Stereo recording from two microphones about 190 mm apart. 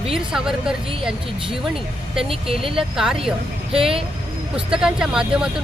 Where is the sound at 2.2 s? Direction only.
30° right (ahead or behind).